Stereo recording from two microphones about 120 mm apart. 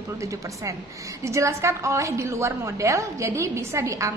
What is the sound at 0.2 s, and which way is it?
A woman's voice, 25° right (ahead or behind).